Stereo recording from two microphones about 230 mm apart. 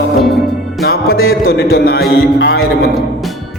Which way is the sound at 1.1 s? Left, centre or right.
Left.